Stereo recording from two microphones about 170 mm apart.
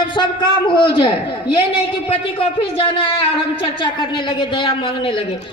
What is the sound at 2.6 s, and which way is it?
A woman's voice, 35° left (ahead or behind).